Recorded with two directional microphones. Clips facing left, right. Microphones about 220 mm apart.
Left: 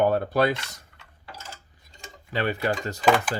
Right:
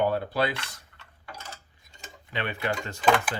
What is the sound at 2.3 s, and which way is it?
Speech, 35° left (ahead or behind).